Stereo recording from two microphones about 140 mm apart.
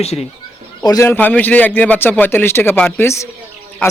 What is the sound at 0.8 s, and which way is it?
A man's voice, 20° left (ahead or behind).